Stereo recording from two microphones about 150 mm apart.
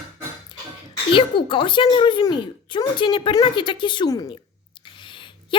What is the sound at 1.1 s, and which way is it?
A woman's voice, 35° left (ahead or behind).